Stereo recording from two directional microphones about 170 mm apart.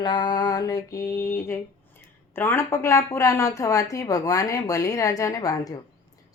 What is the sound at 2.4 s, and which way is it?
A woman's voice, 15° left (ahead or behind).